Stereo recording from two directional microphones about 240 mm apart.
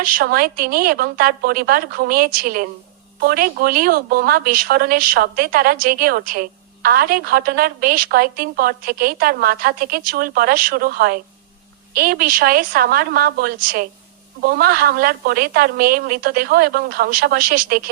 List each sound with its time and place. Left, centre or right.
0.0 s a woman's voice: right